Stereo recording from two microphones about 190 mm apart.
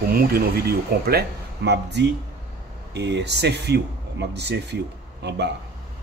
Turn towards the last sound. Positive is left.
turn(degrees=-65)  # may be behind; listen again after turning